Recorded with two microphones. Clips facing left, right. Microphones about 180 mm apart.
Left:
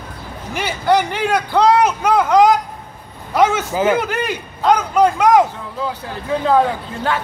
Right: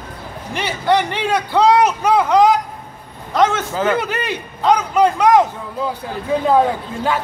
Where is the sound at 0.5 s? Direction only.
Centre (ahead or behind).